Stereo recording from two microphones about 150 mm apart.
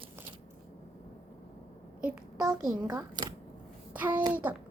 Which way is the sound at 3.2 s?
30° right (ahead or behind).